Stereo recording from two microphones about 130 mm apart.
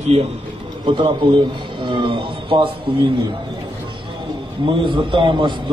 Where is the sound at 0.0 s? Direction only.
50° right (ahead or behind).